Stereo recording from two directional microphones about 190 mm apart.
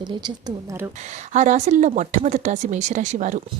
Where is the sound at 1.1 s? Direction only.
40° right (ahead or behind).